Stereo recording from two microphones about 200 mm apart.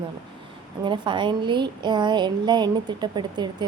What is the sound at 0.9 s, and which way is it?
A woman's voice, 25° right (ahead or behind).